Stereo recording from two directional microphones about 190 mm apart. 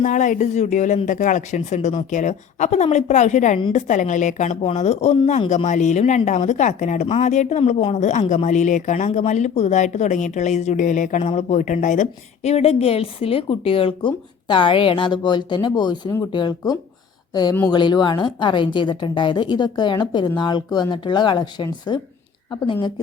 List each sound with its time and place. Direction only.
0.0 s a woman's voice: 40° left (ahead or behind); by 22.9 s 25° left (ahead or behind)